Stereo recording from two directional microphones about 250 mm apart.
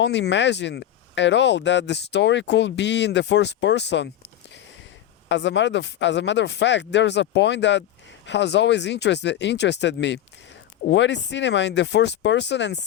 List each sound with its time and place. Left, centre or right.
0.0 s speech: left